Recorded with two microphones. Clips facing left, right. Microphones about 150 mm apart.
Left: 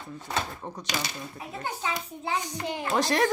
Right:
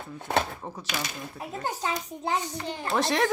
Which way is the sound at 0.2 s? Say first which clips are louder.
Right 5 dB; 60° right (ahead or behind).